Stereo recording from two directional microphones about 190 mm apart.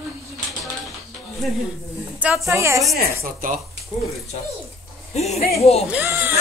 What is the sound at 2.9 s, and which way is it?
Speech, 50° right (ahead or behind).